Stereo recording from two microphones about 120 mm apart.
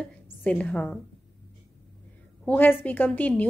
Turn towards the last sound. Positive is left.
turn(degrees=15)  # may be behind; listen again after turning